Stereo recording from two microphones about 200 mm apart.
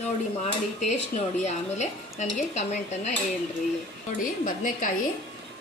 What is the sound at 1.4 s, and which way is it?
A woman's voice, 35° left (ahead or behind).